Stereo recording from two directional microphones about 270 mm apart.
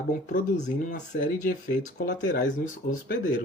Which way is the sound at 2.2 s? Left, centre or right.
Left.